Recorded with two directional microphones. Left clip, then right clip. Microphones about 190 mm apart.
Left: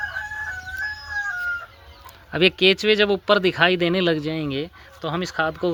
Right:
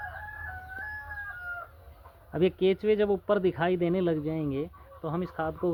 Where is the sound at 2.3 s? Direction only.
20° left (ahead or behind).